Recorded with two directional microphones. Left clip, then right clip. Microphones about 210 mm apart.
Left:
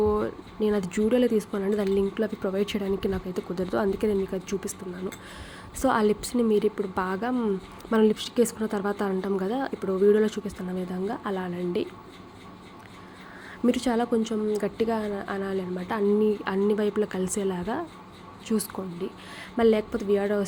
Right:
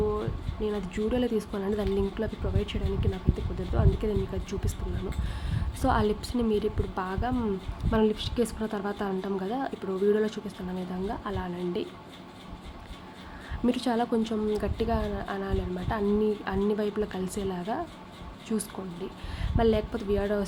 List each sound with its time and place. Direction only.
0.2 s speech: 25° left (ahead or behind)
5.8 s a woman's voice: 15° left (ahead or behind)
13.7 s a woman's voice: 10° left (ahead or behind)